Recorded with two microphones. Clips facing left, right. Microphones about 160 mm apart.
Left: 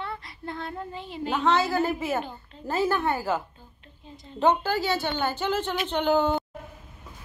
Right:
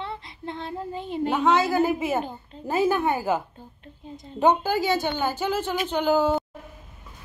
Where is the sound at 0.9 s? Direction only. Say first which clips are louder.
Right 10 dB; 50° right (ahead or behind).